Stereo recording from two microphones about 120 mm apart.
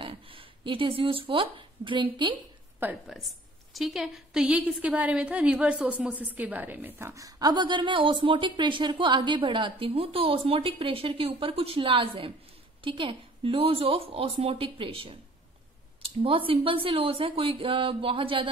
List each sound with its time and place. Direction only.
0.0 s speech: 45° right (ahead or behind)
2.3 s a sound: 15° right (ahead or behind)
3.7 s a woman's voice: 5° right (ahead or behind); by 18.5 s 45° right (ahead or behind)